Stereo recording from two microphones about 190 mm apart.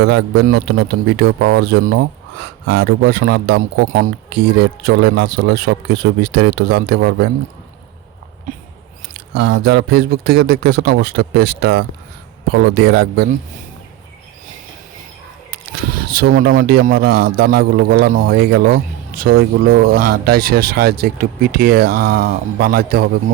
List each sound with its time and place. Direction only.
0.0 s a man's voice: 65° right (ahead or behind)
9.1 s a man's voice: 65° right (ahead or behind)
15.7 s speech: 55° right (ahead or behind)
17.0 s a man's voice: 90° right
17.3 s a man's voice: 55° right (ahead or behind)